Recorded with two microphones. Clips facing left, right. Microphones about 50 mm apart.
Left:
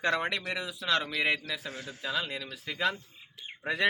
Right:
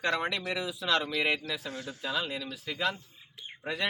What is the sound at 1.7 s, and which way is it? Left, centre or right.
Speech, left.